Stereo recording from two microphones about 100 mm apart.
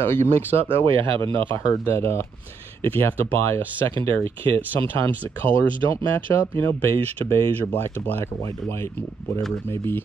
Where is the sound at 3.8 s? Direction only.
60° right (ahead or behind).